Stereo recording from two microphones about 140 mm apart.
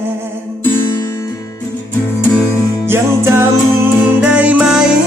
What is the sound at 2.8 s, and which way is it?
Music, 20° right (ahead or behind).